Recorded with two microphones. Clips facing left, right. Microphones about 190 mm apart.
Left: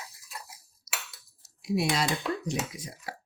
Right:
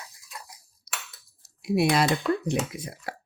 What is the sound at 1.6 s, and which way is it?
Speech, 60° right (ahead or behind).